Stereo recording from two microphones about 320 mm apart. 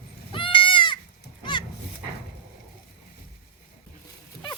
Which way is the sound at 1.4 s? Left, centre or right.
Centre.